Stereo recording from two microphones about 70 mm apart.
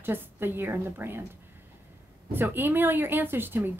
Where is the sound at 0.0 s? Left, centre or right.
Right.